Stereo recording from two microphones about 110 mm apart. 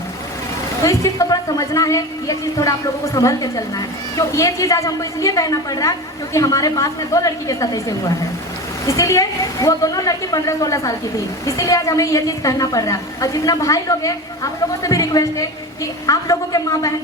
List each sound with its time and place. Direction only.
0.8 s a woman's voice: 30° left (ahead or behind)